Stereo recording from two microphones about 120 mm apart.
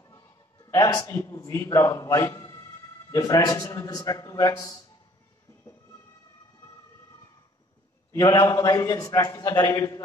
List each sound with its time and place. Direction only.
0.0 s a man's voice: 25° left (ahead or behind)
8.1 s a man's voice: 25° left (ahead or behind)